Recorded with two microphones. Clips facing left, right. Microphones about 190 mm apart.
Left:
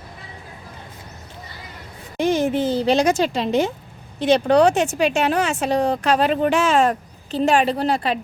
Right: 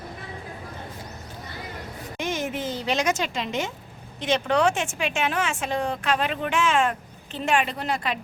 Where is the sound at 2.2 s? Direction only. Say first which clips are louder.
Left 10 dB; 35° left (ahead or behind).